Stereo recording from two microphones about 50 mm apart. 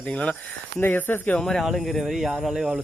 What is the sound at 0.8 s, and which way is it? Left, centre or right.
Speech, left.